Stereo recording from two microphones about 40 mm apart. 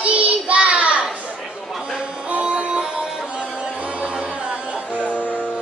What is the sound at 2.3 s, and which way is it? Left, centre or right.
Music, right.